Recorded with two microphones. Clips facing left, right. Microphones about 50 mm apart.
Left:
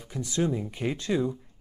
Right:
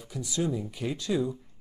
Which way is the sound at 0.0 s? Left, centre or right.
Left.